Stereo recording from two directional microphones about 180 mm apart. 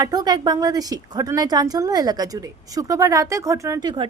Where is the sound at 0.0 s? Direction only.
20° right (ahead or behind).